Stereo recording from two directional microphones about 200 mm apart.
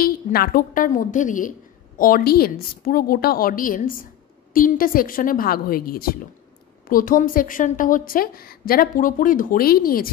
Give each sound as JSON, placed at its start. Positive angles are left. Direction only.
{"t": 0.0, "sound": "a woman's voice", "side_deg": 50}